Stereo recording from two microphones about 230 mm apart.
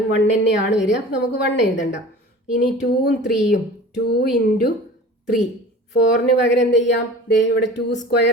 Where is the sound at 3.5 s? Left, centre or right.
Left.